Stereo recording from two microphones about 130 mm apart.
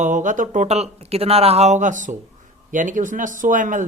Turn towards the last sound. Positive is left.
turn(degrees=-85)